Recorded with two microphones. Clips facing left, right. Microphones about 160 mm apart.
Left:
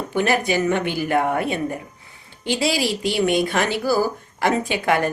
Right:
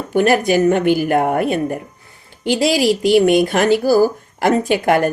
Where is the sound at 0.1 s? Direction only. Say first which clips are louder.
Right 7 dB; 45° right (ahead or behind).